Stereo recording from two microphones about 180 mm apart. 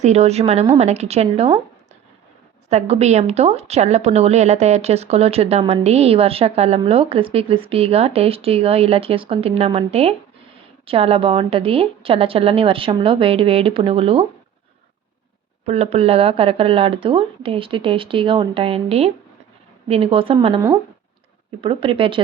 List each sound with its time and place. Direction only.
0.0 s speech: 35° right (ahead or behind)
2.6 s speech: 35° right (ahead or behind)
15.6 s speech: 35° right (ahead or behind)
21.6 s speech: 30° right (ahead or behind)